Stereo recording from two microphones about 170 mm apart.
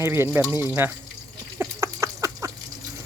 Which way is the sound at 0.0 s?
15° right (ahead or behind).